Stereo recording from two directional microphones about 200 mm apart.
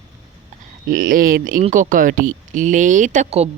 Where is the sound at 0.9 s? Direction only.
45° right (ahead or behind).